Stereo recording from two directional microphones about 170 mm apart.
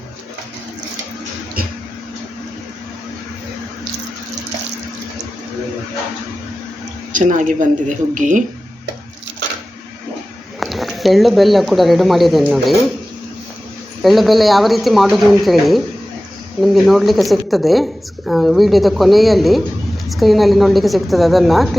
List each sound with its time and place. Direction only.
7.1 s speech: 50° right (ahead or behind)
10.6 s speech: centre (ahead or behind)
14.0 s speech: centre (ahead or behind)